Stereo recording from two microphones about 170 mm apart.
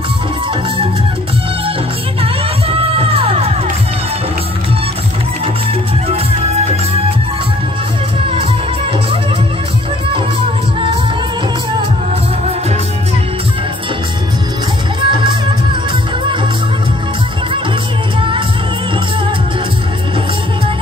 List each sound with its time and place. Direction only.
2.8 s music: 35° right (ahead or behind)
15.0 s music: 30° right (ahead or behind)